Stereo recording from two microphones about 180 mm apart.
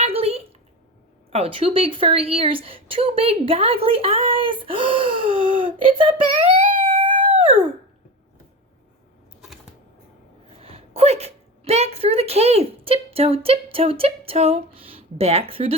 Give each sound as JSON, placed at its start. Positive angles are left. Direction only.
{"t": 0.0, "sound": "a sound", "side_deg": -35}
{"t": 1.3, "sound": "a woman's voice", "side_deg": -30}
{"t": 6.7, "sound": "dog", "side_deg": -30}
{"t": 10.6, "sound": "speech", "side_deg": -35}